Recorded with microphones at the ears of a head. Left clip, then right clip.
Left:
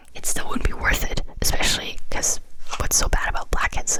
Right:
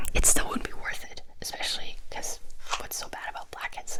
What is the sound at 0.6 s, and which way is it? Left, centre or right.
Whispering, left.